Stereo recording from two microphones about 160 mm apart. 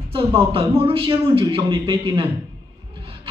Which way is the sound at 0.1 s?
35° right (ahead or behind).